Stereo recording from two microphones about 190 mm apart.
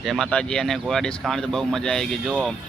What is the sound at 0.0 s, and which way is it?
Speech, centre (ahead or behind).